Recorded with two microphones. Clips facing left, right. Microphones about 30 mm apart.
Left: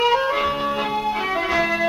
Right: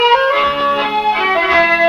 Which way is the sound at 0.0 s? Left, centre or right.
Right.